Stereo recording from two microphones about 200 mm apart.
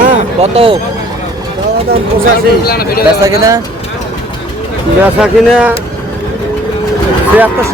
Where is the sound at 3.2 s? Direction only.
15° right (ahead or behind).